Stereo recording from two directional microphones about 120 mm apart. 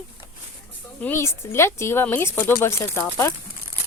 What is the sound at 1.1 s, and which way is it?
Speech, 20° left (ahead or behind).